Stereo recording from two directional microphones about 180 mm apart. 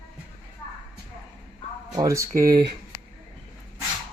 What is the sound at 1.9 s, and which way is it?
Speech, 15° right (ahead or behind).